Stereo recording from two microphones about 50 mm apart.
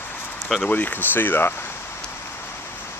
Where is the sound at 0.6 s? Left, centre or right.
Left.